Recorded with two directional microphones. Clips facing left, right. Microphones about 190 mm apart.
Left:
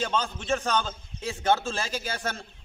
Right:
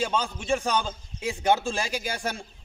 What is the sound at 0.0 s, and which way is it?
A man's voice, 10° right (ahead or behind).